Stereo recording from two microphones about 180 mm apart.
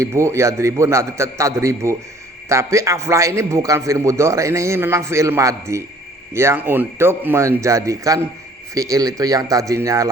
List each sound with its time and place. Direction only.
0.0 s a man's voice: 15° right (ahead or behind)